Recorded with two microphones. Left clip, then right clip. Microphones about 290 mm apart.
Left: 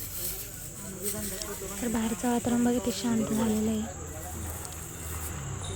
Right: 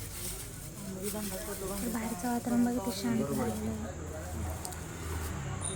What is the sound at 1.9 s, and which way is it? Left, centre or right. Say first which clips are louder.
Speech: left 8 dB; left.